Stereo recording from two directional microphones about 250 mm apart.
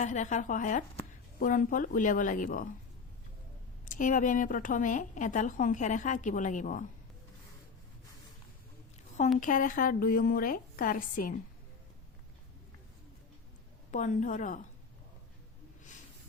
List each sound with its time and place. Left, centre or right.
0.0 s speech: left
3.8 s speech: left
9.4 s speech: left
13.9 s speech: left